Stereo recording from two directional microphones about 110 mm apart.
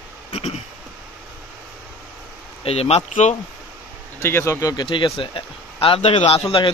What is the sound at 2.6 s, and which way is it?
Speech, 70° left (ahead or behind).